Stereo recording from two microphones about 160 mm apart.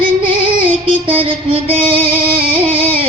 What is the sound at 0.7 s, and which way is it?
Music, 35° right (ahead or behind).